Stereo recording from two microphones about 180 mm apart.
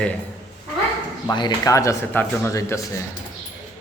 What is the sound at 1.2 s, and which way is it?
Speech, 20° left (ahead or behind).